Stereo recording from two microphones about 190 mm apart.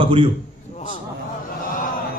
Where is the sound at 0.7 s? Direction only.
40° left (ahead or behind).